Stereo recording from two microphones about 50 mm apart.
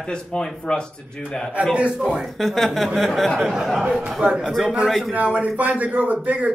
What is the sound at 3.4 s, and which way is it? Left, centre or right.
A man's voice, centre.